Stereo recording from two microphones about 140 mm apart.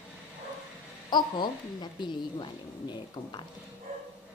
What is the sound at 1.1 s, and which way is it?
Speech, 30° left (ahead or behind).